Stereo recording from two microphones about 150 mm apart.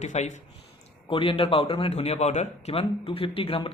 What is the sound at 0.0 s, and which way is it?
Speech, 50° left (ahead or behind).